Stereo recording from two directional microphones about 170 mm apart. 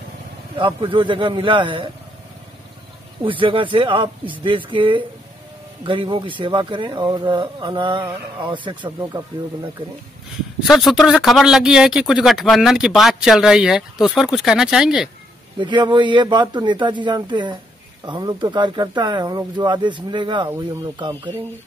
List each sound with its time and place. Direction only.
0.6 s speech: 30° right (ahead or behind)
3.3 s speech: 30° right (ahead or behind)
10.7 s speech: centre (ahead or behind)
15.6 s speech: 25° right (ahead or behind)